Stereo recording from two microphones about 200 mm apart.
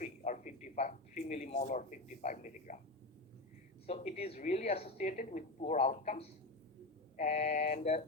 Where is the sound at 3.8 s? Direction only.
35° left (ahead or behind).